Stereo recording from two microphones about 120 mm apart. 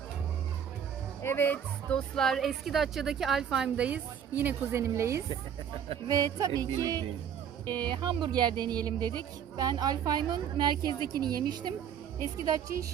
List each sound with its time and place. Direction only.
1.2 s speech: 20° left (ahead or behind); by 11.7 s 35° right (ahead or behind)